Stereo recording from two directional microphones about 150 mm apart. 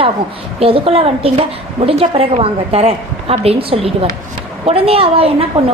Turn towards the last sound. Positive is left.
turn(degrees=-40)  # may be behind; listen again after turning